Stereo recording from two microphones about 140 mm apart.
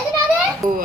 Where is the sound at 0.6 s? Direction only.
75° right (ahead or behind).